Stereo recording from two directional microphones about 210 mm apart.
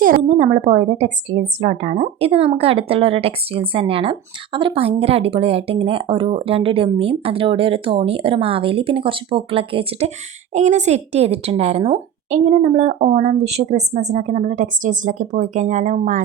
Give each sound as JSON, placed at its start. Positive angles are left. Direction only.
{"t": 0.0, "sound": "a woman's voice", "side_deg": -40}